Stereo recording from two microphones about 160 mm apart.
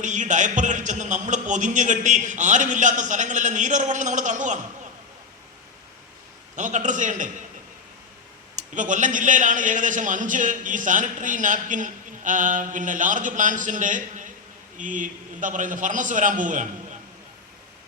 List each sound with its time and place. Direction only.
0.0 s a man's voice: 50° right (ahead or behind)
6.6 s a man's voice: 50° right (ahead or behind)
8.5 s a man's voice: 50° right (ahead or behind)